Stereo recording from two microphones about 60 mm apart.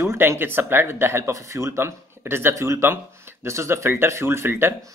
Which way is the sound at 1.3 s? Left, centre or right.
Right.